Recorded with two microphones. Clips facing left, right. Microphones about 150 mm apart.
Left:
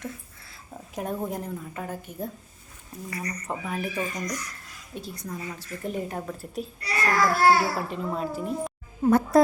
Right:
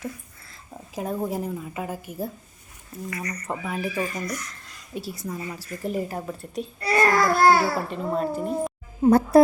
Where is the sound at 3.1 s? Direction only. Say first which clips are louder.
Even; 35° left (ahead or behind).